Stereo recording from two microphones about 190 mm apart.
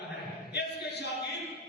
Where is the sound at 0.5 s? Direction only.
65° left (ahead or behind).